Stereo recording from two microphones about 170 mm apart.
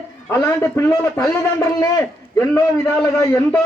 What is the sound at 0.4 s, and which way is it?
A man's voice, 15° left (ahead or behind).